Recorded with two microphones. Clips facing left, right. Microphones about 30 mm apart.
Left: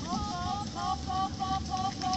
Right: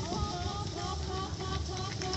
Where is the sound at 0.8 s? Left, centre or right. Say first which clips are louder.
Left 5 dB; centre.